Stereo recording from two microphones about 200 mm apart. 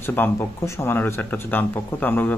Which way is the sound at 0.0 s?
10° left (ahead or behind).